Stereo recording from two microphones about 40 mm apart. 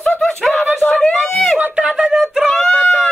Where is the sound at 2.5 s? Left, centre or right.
Centre.